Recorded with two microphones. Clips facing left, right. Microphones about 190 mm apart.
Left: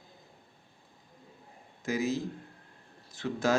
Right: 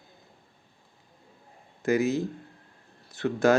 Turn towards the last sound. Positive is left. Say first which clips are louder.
# right 7 dB
turn(degrees=-65)  # may be behind; listen again after turning